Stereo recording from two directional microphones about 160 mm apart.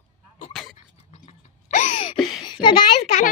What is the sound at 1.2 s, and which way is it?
Wail, 50° left (ahead or behind).